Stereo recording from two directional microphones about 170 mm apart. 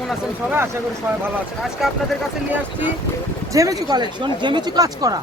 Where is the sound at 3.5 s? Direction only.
20° right (ahead or behind).